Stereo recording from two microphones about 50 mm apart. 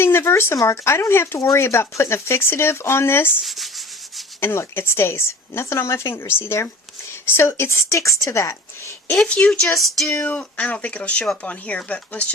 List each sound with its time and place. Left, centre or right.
0.0 s speech: left
3.4 s sanding: centre
4.4 s speech: left
9.1 s speech: centre
9.6 s music: centre
10.2 s speech: left